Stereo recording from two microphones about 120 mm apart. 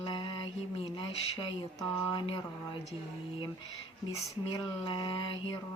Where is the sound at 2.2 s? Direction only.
45° left (ahead or behind).